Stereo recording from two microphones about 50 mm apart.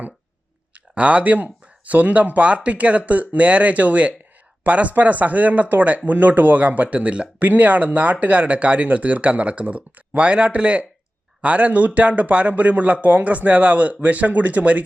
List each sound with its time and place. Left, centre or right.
0.7 s a man's voice: right